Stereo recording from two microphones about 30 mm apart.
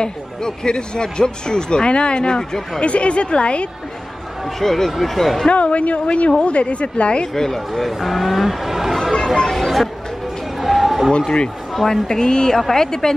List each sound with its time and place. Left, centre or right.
0.7 s speech: left
2.8 s a woman's voice: left
4.6 s a woman's voice: centre
5.5 s a woman's voice: left
7.3 s a woman's voice: centre
7.7 s speech: centre
9.1 s speech: centre
10.6 s chatter: centre
11.7 s a woman's voice: centre